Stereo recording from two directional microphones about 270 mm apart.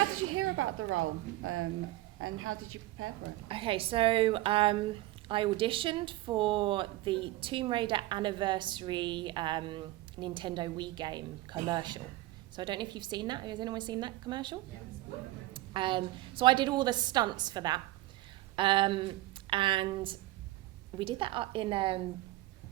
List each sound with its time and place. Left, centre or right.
0.2 s a woman's voice: right
3.5 s a woman's voice: centre